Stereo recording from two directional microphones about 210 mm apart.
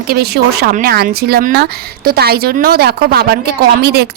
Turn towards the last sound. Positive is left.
turn(degrees=-50)  # may be behind; listen again after turning